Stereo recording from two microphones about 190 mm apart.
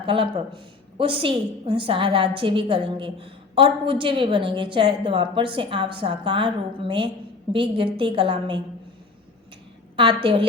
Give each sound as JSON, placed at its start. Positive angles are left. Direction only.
{"t": 0.0, "sound": "a woman's voice", "side_deg": -30}
{"t": 9.9, "sound": "a woman's voice", "side_deg": -25}